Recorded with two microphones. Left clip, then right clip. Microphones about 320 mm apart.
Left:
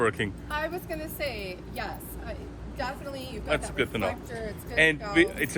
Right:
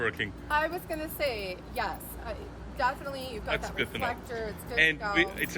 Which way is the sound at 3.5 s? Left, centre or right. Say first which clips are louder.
Left 4 dB; centre.